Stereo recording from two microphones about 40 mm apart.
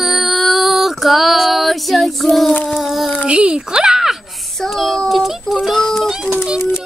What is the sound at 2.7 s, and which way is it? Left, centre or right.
Child singing, centre.